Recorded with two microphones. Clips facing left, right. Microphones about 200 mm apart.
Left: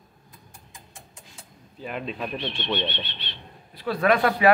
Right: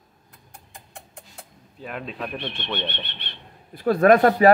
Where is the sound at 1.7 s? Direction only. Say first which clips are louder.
Left 1 dB; centre (ahead or behind).